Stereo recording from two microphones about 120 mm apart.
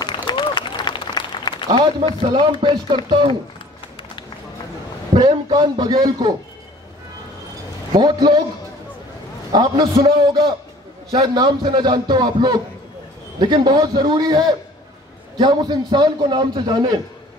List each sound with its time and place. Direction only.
0.0 s applause: 40° left (ahead or behind)
1.7 s a man's voice: 40° right (ahead or behind)
5.2 s a man's voice: 40° right (ahead or behind)
7.9 s a man's voice: 35° right (ahead or behind)
9.5 s a man's voice: 35° right (ahead or behind)